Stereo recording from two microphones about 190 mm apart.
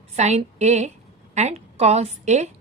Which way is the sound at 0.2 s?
35° right (ahead or behind).